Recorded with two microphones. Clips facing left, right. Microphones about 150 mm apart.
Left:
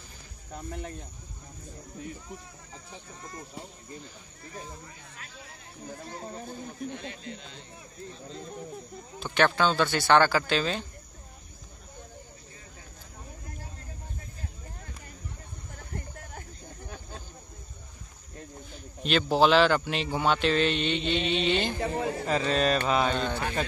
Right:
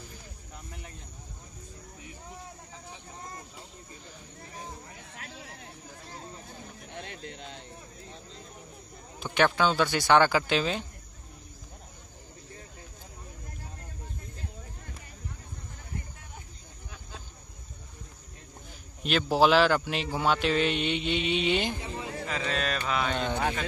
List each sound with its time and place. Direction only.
5.2 s a sound: 65° right (ahead or behind)
7.1 s speech: 60° right (ahead or behind)
9.2 s a man's voice: 10° right (ahead or behind)
19.0 s a man's voice: 5° right (ahead or behind)
21.7 s a man's voice: 60° left (ahead or behind)
22.2 s speech: 35° left (ahead or behind)